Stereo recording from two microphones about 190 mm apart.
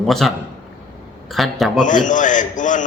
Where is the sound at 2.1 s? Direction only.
40° left (ahead or behind).